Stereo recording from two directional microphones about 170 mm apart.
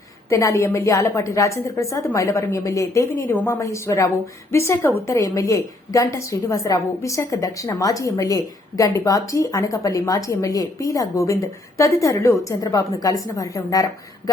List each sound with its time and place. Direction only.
0.3 s a woman's voice: 20° left (ahead or behind)